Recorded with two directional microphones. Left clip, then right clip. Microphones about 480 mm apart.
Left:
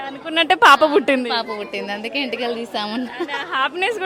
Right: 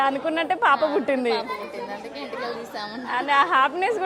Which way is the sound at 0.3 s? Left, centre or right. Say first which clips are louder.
Left 11 dB; centre.